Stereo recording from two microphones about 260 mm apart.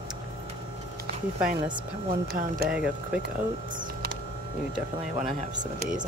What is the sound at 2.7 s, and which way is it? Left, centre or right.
Speech, centre.